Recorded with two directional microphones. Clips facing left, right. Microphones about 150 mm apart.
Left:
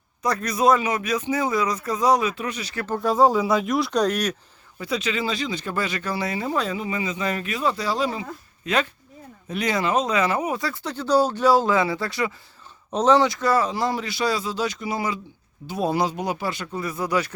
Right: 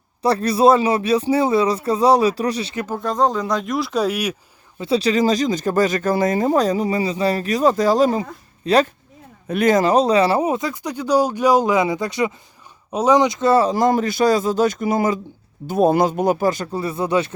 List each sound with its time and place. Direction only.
0.2 s speech: 30° right (ahead or behind)
2.7 s speech: 10° right (ahead or behind)
3.0 s speech: 5° left (ahead or behind)
4.8 s speech: 30° right (ahead or behind)
9.5 s speech: 50° right (ahead or behind); by 10.6 s 30° right (ahead or behind)
10.6 s speech: 15° right (ahead or behind)
13.7 s speech: 45° right (ahead or behind); by 17.3 s 25° right (ahead or behind)